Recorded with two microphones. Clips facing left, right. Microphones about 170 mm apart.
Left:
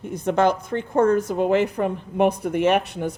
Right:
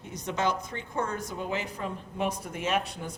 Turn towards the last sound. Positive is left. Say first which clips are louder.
# left 10 dB
turn(degrees=65)  # may be behind; listen again after turning